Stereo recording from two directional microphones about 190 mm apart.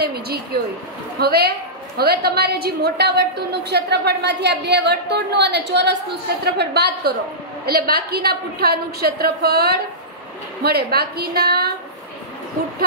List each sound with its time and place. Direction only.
0.0 s a woman's voice: 55° right (ahead or behind)